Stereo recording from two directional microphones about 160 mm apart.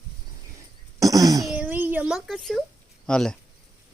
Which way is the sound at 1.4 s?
5° right (ahead or behind).